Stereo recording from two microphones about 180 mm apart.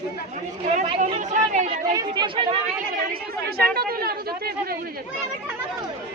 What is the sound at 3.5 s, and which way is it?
A woman's voice, 60° right (ahead or behind).